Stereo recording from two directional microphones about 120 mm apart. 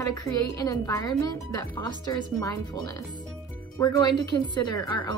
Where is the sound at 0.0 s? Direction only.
30° left (ahead or behind).